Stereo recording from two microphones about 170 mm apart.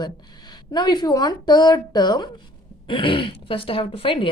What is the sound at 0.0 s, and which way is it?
A woman's voice, 25° left (ahead or behind).